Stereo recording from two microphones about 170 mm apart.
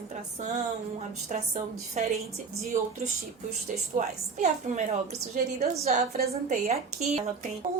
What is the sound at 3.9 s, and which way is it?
A woman's voice, 45° right (ahead or behind).